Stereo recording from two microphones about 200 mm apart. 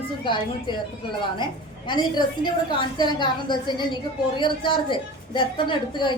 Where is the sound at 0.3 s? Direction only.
25° left (ahead or behind).